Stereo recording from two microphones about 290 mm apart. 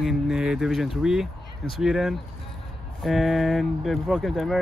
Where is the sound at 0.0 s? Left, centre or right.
Centre.